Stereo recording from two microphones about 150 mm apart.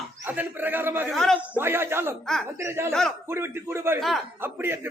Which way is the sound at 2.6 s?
15° right (ahead or behind).